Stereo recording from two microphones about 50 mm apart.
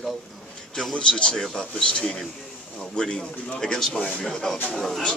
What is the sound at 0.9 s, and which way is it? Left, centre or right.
Speech, centre.